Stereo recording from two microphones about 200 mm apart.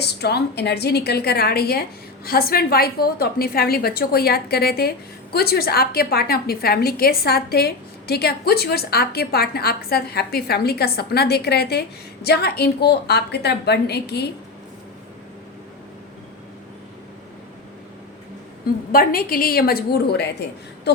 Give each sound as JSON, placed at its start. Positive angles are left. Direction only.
{"t": 0.0, "sound": "a woman's voice", "side_deg": 55}
{"t": 18.9, "sound": "a woman's voice", "side_deg": 45}